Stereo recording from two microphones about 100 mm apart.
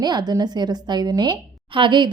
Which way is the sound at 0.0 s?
45° right (ahead or behind).